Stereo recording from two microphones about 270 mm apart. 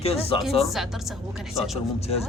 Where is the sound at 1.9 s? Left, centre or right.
Left.